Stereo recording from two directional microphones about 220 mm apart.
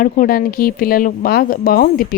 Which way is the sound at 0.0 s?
40° left (ahead or behind).